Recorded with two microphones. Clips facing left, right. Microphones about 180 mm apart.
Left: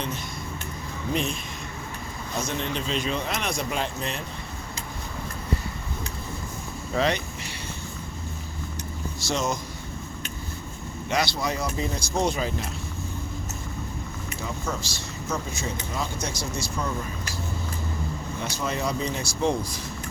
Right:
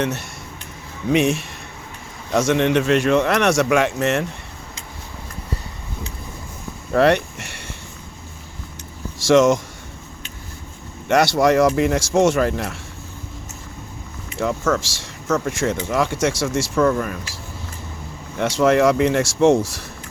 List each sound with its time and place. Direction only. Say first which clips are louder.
1.1 s speech: right 11 dB; 80° right
2.3 s speech: right 13 dB; 90° right
6.9 s speech: right 9 dB; 65° right (ahead or behind)
9.2 s speech: right 14 dB; 90° right
11.1 s speech: right 11 dB; 75° right (ahead or behind)
14.3 s speech: right 12 dB; 85° right
18.3 s speech: right 15 dB; 85° right